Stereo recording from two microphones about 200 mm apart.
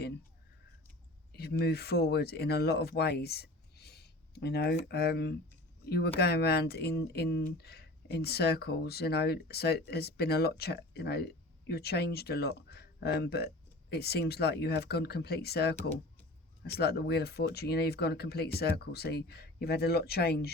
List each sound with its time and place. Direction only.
1.3 s speech: 55° left (ahead or behind)
16.7 s speech: 55° left (ahead or behind)